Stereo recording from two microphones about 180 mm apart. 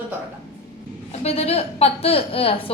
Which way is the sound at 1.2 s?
35° left (ahead or behind).